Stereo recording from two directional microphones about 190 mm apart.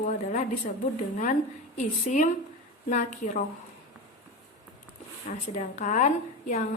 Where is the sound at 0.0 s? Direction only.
40° left (ahead or behind).